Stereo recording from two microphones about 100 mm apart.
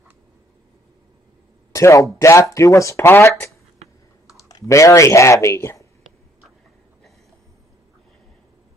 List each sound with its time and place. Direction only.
1.7 s a sound: 30° left (ahead or behind)
2.1 s speech: 30° left (ahead or behind)
4.3 s typing: 35° left (ahead or behind)
4.6 s speech: 30° left (ahead or behind)